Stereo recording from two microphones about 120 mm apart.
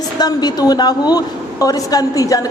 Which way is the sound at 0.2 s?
35° left (ahead or behind).